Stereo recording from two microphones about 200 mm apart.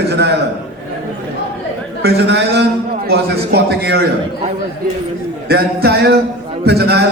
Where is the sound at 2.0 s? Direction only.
55° right (ahead or behind).